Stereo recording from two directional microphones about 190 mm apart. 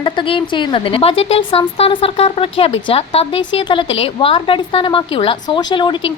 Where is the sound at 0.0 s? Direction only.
25° left (ahead or behind).